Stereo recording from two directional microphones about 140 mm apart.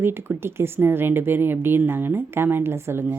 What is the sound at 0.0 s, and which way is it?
Speech, 15° right (ahead or behind).